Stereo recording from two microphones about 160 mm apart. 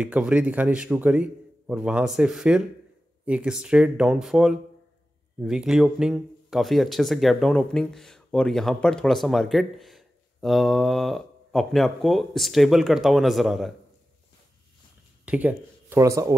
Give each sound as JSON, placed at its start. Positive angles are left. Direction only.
{"t": 0.0, "sound": "a man's voice", "side_deg": -5}
{"t": 15.2, "sound": "a sound", "side_deg": -10}
{"t": 16.0, "sound": "speech", "side_deg": -20}